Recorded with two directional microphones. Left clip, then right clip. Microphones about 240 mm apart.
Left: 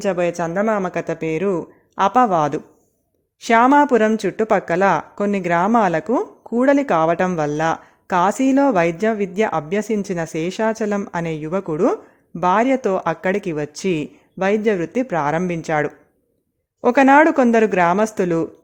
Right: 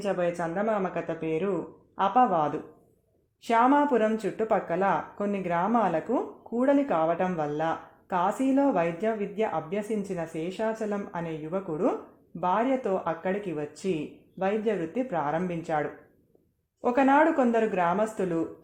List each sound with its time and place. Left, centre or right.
0.0 s speech: left